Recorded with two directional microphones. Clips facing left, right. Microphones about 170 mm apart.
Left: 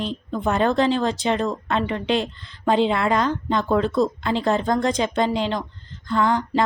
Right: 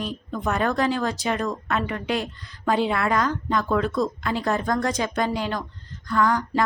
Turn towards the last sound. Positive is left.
turn(degrees=25)  # may be behind; listen again after turning